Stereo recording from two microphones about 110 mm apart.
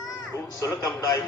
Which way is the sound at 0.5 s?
35° left (ahead or behind).